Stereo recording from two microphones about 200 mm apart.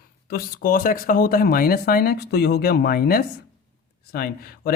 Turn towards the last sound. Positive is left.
turn(degrees=50)  # may be behind; listen again after turning